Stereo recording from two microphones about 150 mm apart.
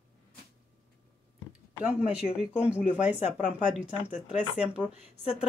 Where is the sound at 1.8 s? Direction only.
5° right (ahead or behind).